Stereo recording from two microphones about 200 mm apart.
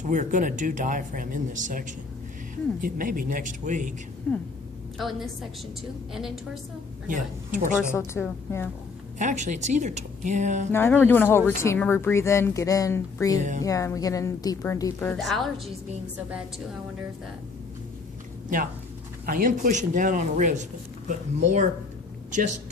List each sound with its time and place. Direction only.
0.0 s speech: 40° right (ahead or behind)
2.8 s speech: 45° right (ahead or behind)
4.3 s a woman's voice: 5° left (ahead or behind)
7.1 s speech: 40° right (ahead or behind)
7.9 s speech: 15° left (ahead or behind)
9.1 s speech: 35° right (ahead or behind)
10.7 s speech: 10° left (ahead or behind)
13.4 s speech: 35° right (ahead or behind)
13.7 s speech: 15° left (ahead or behind); by 15.7 s centre (ahead or behind)
19.2 s speech: 45° right (ahead or behind)